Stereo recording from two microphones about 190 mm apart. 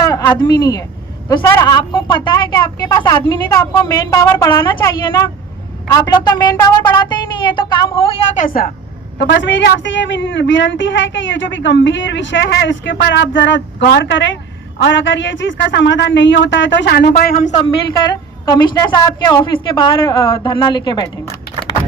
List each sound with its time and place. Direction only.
0.0 s a woman's voice: 15° left (ahead or behind)
8.3 s speech: 45° left (ahead or behind)
9.1 s a woman's voice: 65° left (ahead or behind)
17.1 s speech: 45° left (ahead or behind)
17.8 s a woman's voice: 20° left (ahead or behind)